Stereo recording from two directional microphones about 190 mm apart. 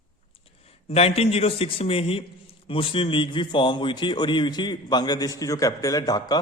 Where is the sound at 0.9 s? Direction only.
30° left (ahead or behind).